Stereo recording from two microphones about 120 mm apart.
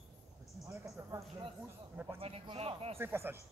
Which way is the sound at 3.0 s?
20° right (ahead or behind).